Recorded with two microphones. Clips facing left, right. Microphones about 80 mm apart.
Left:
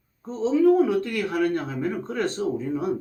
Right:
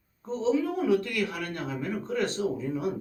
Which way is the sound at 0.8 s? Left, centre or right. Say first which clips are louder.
Left 3 dB; left.